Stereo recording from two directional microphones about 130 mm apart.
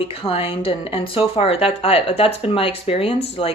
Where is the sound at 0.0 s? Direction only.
45° left (ahead or behind).